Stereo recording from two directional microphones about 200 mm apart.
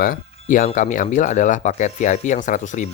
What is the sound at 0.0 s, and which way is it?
Speech, 40° left (ahead or behind).